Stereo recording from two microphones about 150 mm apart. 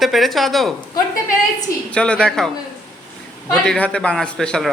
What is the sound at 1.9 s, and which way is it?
Speech, 5° left (ahead or behind).